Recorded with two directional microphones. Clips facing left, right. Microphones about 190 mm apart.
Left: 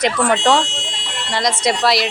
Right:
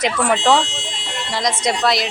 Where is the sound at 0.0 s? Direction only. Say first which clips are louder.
Left 1 dB; centre (ahead or behind).